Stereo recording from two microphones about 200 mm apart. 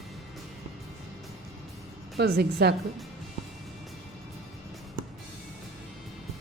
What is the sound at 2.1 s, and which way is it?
Speech, 55° right (ahead or behind).